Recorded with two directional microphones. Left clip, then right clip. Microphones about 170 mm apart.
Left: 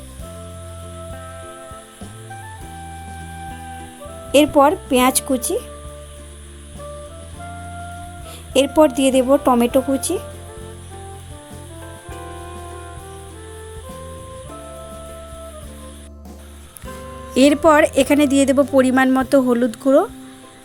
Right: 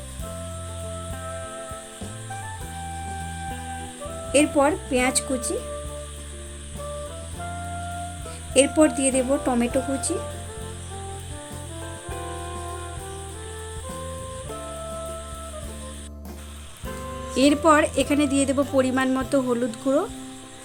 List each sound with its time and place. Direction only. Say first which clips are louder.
4.3 s speech: left 7 dB; 40° left (ahead or behind)
8.5 s speech: left 5 dB; 40° left (ahead or behind)
12.1 s music: even; centre (ahead or behind)
16.9 s music: even; centre (ahead or behind)
17.3 s speech: left 5 dB; 45° left (ahead or behind)